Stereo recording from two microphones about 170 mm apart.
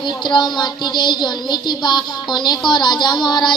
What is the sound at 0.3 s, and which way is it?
Speech, 25° left (ahead or behind).